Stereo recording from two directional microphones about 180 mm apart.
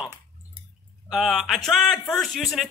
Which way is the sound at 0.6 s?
30° right (ahead or behind).